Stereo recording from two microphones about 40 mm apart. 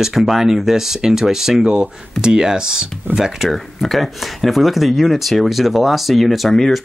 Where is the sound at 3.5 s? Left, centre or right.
Centre.